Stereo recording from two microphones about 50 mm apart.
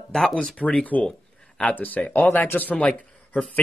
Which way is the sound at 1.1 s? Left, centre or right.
Centre.